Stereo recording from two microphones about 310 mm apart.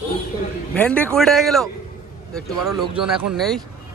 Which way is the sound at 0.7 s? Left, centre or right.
Centre.